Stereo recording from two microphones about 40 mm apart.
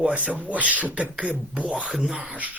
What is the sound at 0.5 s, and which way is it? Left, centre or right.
Speech, right.